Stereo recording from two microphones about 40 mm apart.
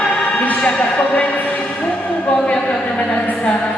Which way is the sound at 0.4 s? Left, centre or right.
Left.